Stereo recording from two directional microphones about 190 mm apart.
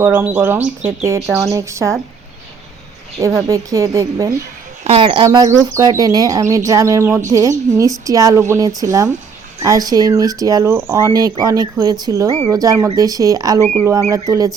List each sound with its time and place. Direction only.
0.0 s a woman's voice: 10° right (ahead or behind)
3.2 s a woman's voice: 15° right (ahead or behind)
4.8 s a woman's voice: 30° right (ahead or behind)